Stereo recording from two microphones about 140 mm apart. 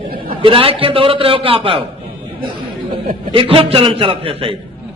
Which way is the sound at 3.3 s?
40° right (ahead or behind).